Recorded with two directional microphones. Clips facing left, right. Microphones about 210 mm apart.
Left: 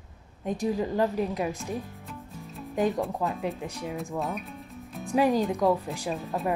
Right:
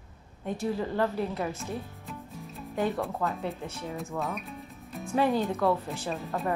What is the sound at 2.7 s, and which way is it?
A woman's voice, 15° left (ahead or behind).